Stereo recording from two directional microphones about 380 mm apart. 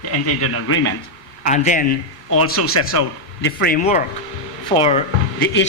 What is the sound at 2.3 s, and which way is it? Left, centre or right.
Speech, left.